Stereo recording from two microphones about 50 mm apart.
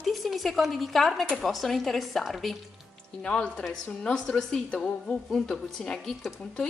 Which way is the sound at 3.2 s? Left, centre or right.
Centre.